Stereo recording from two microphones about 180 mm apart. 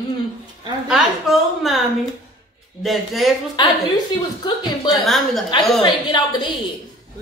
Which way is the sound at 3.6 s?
25° left (ahead or behind).